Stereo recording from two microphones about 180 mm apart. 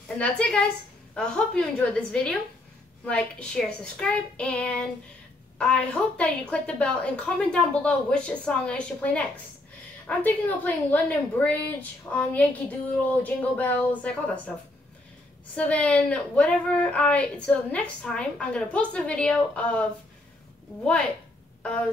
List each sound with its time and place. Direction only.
0.2 s a woman's voice: 5° left (ahead or behind)
15.5 s a woman's voice: 5° left (ahead or behind)